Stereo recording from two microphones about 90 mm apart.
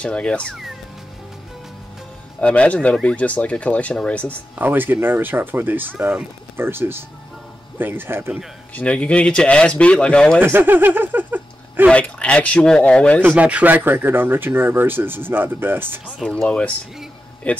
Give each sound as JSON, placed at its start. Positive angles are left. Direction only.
{"t": 0.0, "sound": "speech", "side_deg": 10}
{"t": 2.4, "sound": "speech", "side_deg": 15}
{"t": 4.6, "sound": "speech", "side_deg": -20}
{"t": 8.7, "sound": "speech", "side_deg": 15}
{"t": 10.4, "sound": "speech", "side_deg": -25}
{"t": 11.9, "sound": "speech", "side_deg": 15}
{"t": 13.2, "sound": "speech", "side_deg": -15}
{"t": 16.4, "sound": "speech", "side_deg": 10}